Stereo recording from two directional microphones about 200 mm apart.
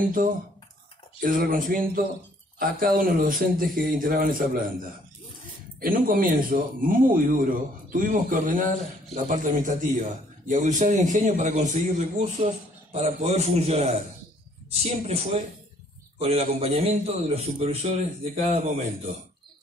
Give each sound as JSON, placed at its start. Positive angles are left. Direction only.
{"t": 0.0, "sound": "a man's voice", "side_deg": -40}
{"t": 5.8, "sound": "a man's voice", "side_deg": -45}